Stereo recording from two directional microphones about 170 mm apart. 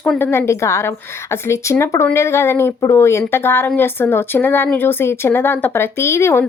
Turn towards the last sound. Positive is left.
turn(degrees=15)  # may be behind; listen again after turning